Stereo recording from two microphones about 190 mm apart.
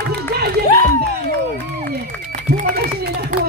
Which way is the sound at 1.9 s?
55° right (ahead or behind).